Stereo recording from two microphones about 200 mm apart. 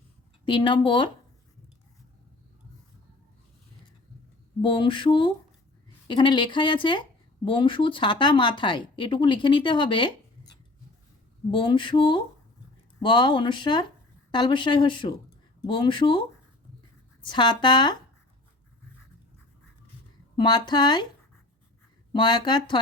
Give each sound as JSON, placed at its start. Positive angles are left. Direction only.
{"t": 0.4, "sound": "speech", "side_deg": 25}
{"t": 4.6, "sound": "speech", "side_deg": 25}
{"t": 11.5, "sound": "speech", "side_deg": 25}
{"t": 17.2, "sound": "speech", "side_deg": 20}
{"t": 20.3, "sound": "speech", "side_deg": 20}
{"t": 22.1, "sound": "speech", "side_deg": 20}